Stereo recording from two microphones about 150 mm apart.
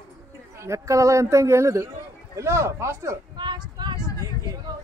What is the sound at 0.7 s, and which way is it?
A man's voice, 20° right (ahead or behind).